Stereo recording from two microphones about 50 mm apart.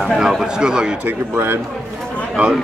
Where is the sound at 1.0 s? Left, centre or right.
Right.